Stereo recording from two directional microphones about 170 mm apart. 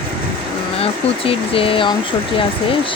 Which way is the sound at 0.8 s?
35° left (ahead or behind).